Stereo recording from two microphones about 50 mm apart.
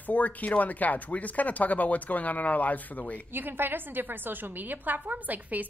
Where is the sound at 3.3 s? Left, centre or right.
Right.